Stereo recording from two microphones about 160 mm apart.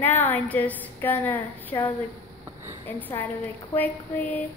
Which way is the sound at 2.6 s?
20° right (ahead or behind).